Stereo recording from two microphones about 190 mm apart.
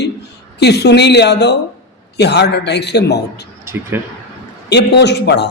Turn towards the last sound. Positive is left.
turn(degrees=65)  # may be behind; listen again after turning